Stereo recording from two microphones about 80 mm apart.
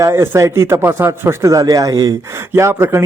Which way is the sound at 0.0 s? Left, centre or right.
Right.